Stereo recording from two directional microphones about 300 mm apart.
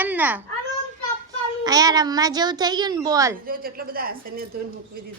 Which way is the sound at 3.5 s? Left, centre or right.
Right.